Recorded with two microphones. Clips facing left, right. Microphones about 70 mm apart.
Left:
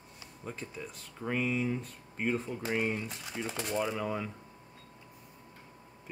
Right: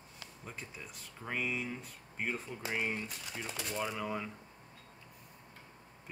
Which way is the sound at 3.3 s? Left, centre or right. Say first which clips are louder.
Left 8 dB; left.